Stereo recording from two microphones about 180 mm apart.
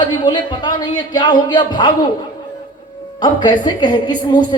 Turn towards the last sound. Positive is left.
turn(degrees=25)  # may be behind; listen again after turning